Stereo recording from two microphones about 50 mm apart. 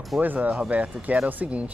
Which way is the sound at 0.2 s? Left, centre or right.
Right.